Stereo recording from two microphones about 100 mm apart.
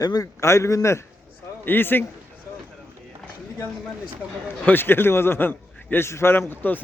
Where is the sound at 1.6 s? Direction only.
20° left (ahead or behind).